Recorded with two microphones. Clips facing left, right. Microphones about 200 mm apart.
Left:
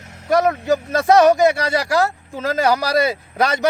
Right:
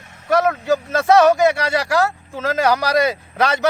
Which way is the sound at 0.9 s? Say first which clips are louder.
Even; 15° left (ahead or behind).